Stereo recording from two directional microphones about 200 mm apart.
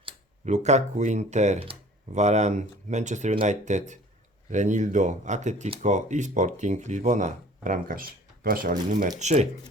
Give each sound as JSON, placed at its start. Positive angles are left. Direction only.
{"t": 0.0, "sound": "speech", "side_deg": -35}